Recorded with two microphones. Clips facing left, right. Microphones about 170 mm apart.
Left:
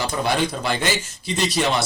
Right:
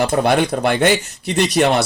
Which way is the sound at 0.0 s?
60° right (ahead or behind).